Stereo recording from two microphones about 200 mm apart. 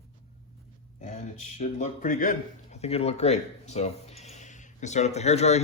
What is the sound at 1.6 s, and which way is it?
Speech, 40° left (ahead or behind).